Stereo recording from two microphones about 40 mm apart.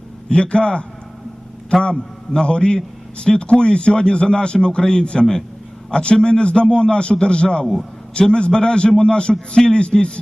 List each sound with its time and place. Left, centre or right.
0.3 s a man's voice: left
2.3 s a man's voice: left
7.6 s a man's voice: centre
8.1 s a man's voice: left